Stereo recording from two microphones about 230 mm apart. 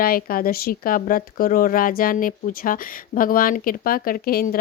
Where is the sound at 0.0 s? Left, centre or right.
Left.